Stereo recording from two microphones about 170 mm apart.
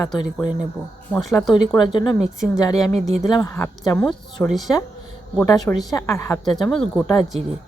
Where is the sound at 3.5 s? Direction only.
10° left (ahead or behind).